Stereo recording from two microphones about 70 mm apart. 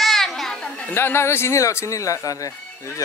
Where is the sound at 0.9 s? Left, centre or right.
Left.